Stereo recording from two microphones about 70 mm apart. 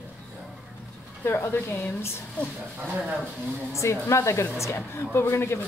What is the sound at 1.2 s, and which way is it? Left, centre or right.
Speech, left.